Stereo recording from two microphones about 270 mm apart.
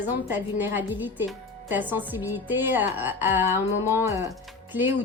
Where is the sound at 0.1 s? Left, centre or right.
Centre.